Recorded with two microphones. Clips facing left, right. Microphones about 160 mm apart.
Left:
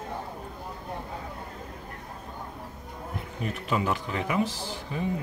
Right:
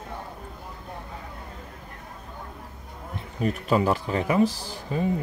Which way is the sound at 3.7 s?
40° right (ahead or behind).